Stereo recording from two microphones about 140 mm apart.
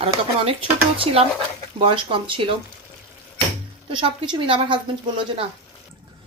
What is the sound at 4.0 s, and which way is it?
Speech, 40° right (ahead or behind).